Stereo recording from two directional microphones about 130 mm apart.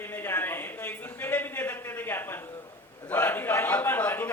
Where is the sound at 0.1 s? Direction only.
15° left (ahead or behind).